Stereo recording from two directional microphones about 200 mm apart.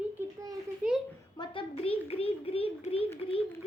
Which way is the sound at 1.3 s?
25° left (ahead or behind).